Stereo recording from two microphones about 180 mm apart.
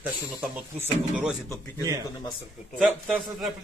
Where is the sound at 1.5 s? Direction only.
20° right (ahead or behind).